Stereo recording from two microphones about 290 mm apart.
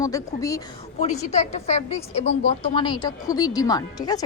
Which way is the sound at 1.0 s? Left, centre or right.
Left.